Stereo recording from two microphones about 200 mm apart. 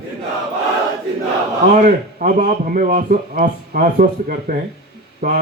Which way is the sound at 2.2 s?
40° right (ahead or behind).